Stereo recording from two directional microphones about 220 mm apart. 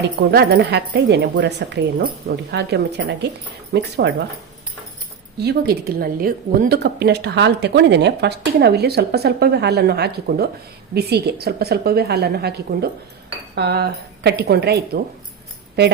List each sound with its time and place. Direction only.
0.2 s a woman's voice: 50° right (ahead or behind)
5.4 s a woman's voice: 45° right (ahead or behind)